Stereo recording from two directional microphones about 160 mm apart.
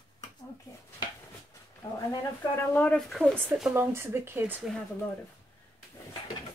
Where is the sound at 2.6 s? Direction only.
10° left (ahead or behind); by 4.6 s 10° right (ahead or behind).